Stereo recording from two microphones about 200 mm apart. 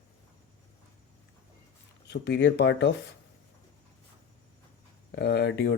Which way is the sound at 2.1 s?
60° left (ahead or behind).